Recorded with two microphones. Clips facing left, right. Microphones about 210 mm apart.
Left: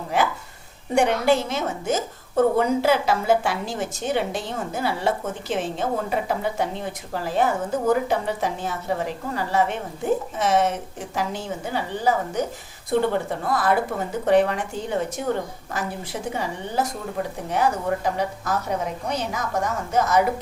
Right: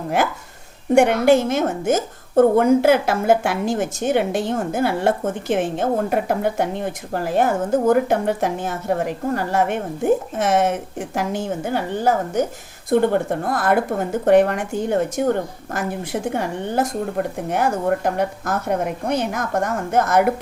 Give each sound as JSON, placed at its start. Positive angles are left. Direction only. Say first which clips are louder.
{"t": 0.9, "sound": "a woman's voice", "louder": "right 5 dB", "side_deg": -50}